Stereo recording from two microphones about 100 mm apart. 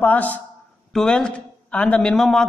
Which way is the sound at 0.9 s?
5° left (ahead or behind).